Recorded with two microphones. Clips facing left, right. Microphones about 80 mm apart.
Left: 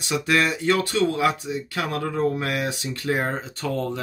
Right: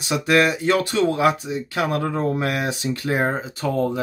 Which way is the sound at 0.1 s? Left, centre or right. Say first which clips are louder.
Right 4 dB; centre.